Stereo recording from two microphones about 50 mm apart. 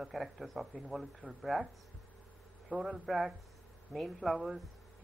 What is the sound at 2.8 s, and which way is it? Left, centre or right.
Speech, centre.